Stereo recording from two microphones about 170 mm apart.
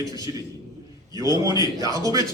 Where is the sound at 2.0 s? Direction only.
20° right (ahead or behind).